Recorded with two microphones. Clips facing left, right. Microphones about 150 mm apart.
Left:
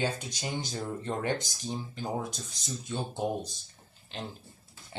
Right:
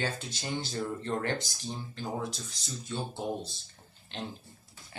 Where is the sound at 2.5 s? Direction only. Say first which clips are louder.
Left 2 dB; 15° left (ahead or behind).